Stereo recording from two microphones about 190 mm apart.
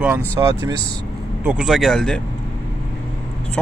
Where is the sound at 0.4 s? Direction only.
20° right (ahead or behind).